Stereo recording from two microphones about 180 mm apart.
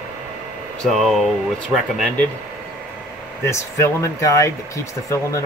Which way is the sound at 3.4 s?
15° left (ahead or behind).